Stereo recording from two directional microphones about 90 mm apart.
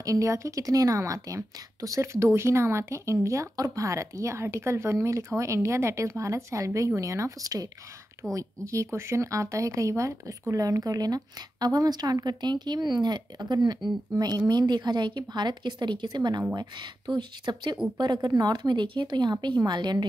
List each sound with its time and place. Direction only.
0.0 s a woman's voice: 35° right (ahead or behind); by 20.1 s 55° right (ahead or behind)